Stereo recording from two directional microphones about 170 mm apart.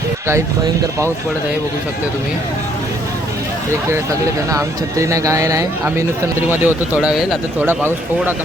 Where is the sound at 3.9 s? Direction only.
20° right (ahead or behind).